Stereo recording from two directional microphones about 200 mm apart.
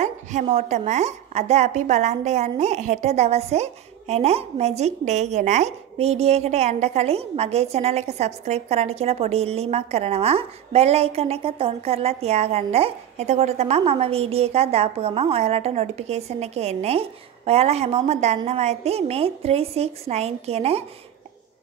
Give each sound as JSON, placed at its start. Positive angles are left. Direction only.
{"t": 0.0, "sound": "a woman's voice", "side_deg": -35}